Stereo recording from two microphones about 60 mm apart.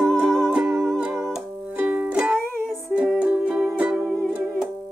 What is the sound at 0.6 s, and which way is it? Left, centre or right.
Music, right.